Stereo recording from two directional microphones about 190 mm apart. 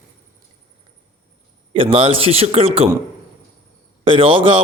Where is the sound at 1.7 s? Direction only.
30° right (ahead or behind).